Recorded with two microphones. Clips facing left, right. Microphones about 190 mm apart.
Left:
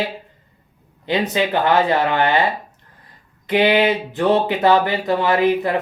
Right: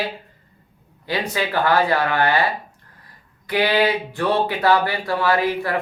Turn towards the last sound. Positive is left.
turn(degrees=20)  # may be behind; listen again after turning